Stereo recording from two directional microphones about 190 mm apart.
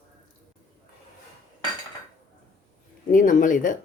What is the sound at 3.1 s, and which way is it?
Speech, 45° left (ahead or behind).